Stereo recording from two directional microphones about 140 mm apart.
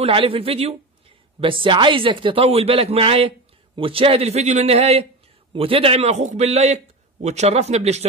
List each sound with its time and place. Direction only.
0.0 s a man's voice: 40° right (ahead or behind)